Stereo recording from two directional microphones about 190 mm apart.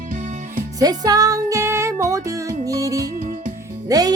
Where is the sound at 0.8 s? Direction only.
20° right (ahead or behind).